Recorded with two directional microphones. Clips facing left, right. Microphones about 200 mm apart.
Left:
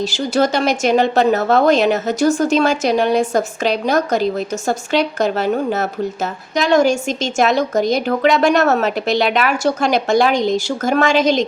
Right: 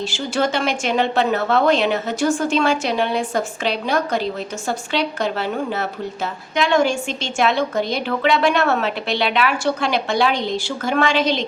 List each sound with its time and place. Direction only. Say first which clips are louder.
0.0 s a woman's voice: left 5 dB; 40° left (ahead or behind)